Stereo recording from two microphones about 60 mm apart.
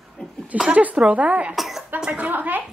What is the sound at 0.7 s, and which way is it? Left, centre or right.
Speech, right.